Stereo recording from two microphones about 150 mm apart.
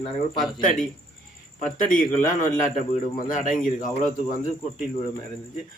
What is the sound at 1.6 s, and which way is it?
Speech, 60° left (ahead or behind).